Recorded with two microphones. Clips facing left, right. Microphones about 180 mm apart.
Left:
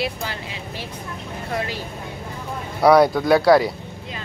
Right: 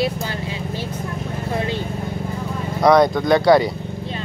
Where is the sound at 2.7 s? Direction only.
10° left (ahead or behind).